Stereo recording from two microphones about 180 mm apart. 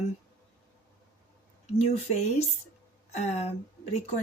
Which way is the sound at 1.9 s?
35° left (ahead or behind).